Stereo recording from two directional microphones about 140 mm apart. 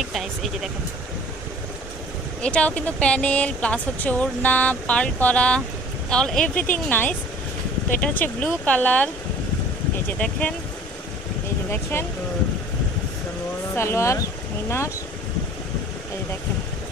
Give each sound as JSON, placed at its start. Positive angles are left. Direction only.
{"t": 2.4, "sound": "speech", "side_deg": 10}
{"t": 11.7, "sound": "speech", "side_deg": 20}
{"t": 13.7, "sound": "speech", "side_deg": 20}